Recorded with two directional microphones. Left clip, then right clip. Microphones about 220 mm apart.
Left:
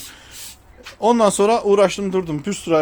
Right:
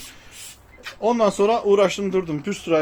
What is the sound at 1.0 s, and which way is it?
Speech, 30° left (ahead or behind).